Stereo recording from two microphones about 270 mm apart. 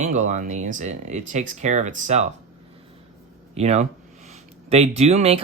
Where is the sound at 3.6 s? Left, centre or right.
Right.